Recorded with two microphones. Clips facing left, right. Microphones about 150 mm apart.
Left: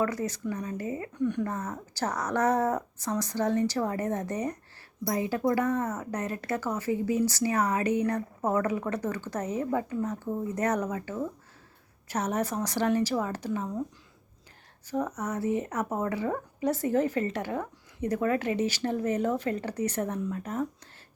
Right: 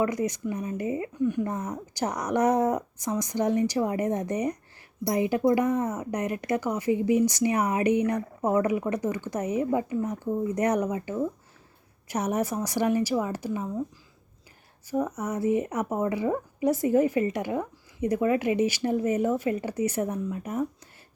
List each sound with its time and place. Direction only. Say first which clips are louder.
0.0 s a woman's voice: right 3 dB; 15° right (ahead or behind)
1.1 s a woman's voice: even; 5° right (ahead or behind)
14.8 s a woman's voice: right 3 dB; 10° right (ahead or behind)